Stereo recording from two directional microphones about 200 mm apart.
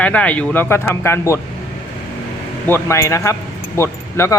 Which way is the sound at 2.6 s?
10° left (ahead or behind).